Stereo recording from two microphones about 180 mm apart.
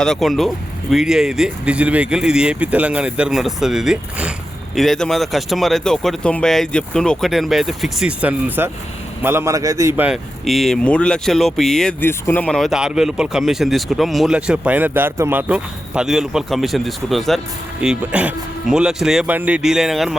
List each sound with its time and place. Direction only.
0.0 s a man's voice: centre (ahead or behind); by 10.1 s 15° right (ahead or behind)
10.1 s speech: centre (ahead or behind)